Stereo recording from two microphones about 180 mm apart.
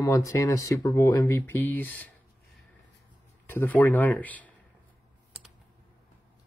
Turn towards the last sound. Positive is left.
turn(degrees=10)  # may be behind; listen again after turning